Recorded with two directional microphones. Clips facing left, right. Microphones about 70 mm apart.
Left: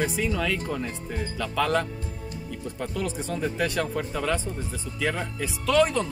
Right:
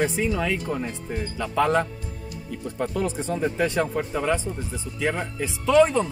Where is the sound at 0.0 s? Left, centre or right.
Right.